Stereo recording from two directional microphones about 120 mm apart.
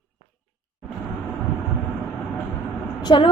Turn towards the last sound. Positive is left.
turn(degrees=40)  # may be behind; listen again after turning